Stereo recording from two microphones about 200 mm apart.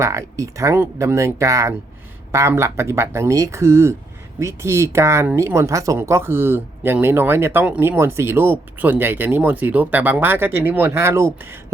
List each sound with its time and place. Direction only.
0.0 s speech: 15° right (ahead or behind)